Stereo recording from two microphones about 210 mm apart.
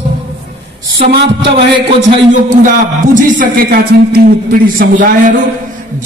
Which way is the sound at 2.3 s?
35° right (ahead or behind).